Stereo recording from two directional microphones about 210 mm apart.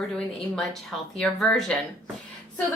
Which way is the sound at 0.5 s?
Centre (ahead or behind).